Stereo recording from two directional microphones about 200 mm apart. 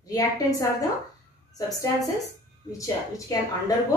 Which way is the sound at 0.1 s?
15° left (ahead or behind).